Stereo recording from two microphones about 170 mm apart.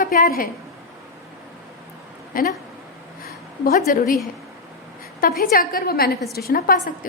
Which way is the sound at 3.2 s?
60° left (ahead or behind).